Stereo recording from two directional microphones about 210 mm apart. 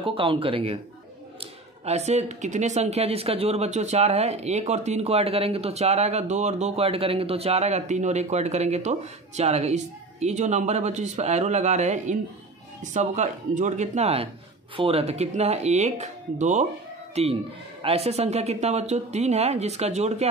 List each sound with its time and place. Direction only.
0.0 s speech: 25° right (ahead or behind)